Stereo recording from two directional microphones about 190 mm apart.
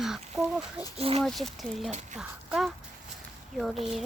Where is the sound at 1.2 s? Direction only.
Centre (ahead or behind).